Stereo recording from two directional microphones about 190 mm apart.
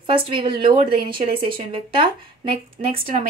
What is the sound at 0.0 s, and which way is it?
Speech, 25° right (ahead or behind).